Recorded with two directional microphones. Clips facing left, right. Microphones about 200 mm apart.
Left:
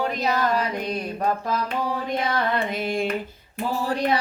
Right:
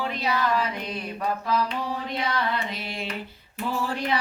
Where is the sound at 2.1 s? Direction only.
50° left (ahead or behind).